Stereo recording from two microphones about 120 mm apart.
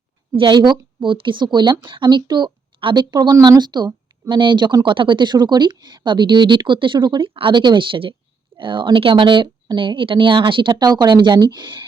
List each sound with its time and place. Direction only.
0.3 s a woman's voice: 40° right (ahead or behind)